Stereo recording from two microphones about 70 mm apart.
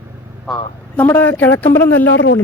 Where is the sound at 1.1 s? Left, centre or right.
Left.